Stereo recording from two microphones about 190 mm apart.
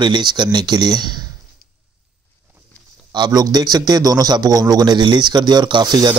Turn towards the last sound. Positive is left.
turn(degrees=-20)  # may be behind; listen again after turning